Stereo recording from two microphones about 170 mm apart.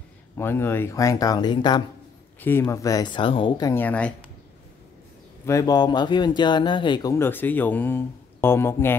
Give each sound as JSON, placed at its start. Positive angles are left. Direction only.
{"t": 0.4, "sound": "speech", "side_deg": 15}
{"t": 2.4, "sound": "speech", "side_deg": 15}
{"t": 3.7, "sound": "speech", "side_deg": 10}
{"t": 5.4, "sound": "speech", "side_deg": 20}